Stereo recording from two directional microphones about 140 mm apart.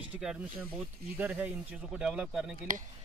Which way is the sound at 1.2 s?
10° right (ahead or behind).